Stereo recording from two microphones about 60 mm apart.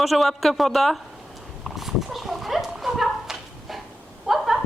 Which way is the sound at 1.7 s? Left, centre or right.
Centre.